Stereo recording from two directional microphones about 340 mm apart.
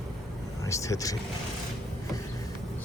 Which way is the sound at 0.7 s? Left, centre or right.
Centre.